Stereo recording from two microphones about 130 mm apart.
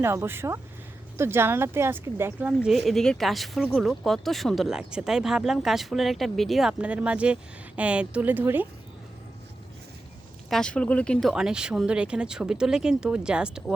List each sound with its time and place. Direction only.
0.0 s speech: 20° right (ahead or behind)
2.6 s speech: centre (ahead or behind)
10.5 s speech: 5° left (ahead or behind)